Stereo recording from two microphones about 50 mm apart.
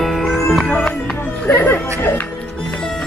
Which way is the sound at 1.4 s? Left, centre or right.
Left.